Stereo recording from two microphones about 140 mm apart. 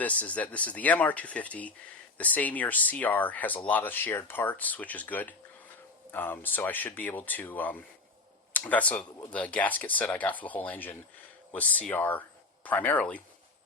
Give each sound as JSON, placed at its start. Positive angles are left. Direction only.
{"t": 0.0, "sound": "speech", "side_deg": 10}